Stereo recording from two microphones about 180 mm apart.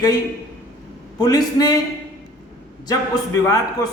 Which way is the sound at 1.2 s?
20° left (ahead or behind).